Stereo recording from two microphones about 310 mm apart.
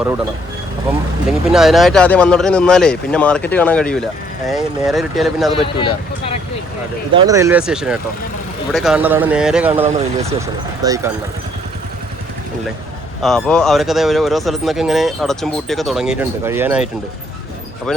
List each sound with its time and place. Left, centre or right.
1.3 s speech: centre
5.5 s speech: centre
7.1 s speech: centre
9.8 s speech: centre
13.2 s speech: centre